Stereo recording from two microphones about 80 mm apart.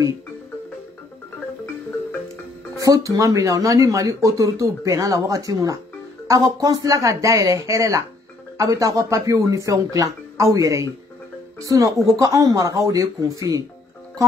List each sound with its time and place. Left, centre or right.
2.8 s speech: right